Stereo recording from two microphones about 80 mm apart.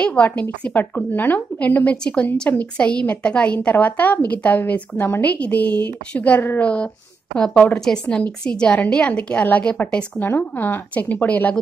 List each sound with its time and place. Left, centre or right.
0.0 s a woman's voice: centre